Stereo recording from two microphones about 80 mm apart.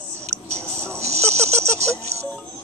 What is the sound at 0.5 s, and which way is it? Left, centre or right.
Music, right.